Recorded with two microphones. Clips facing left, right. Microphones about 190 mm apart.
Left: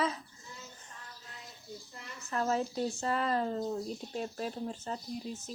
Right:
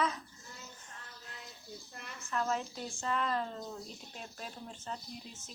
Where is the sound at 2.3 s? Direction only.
35° left (ahead or behind).